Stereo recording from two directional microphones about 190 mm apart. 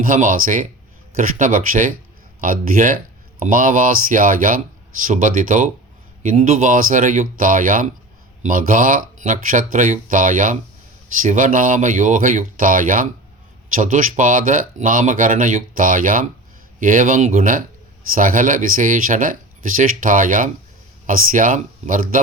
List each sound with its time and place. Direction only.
0.0 s speech: 45° right (ahead or behind)